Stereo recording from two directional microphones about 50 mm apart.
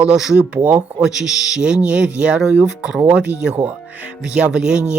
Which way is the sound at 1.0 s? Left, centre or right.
Centre.